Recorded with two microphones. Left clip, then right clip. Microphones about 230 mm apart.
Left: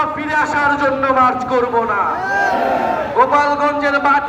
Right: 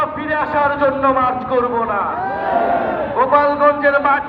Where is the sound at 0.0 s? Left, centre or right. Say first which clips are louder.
Left 2 dB; left.